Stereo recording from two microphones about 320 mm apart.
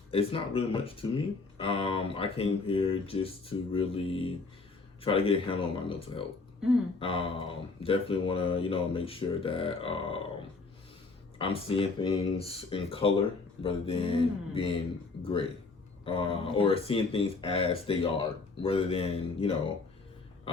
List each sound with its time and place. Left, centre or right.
0.1 s speech: centre
11.3 s speech: centre
16.0 s speech: centre